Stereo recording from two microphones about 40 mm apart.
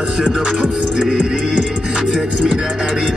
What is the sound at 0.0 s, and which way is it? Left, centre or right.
Music, right.